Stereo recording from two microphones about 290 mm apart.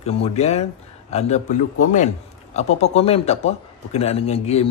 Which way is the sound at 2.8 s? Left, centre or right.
Left.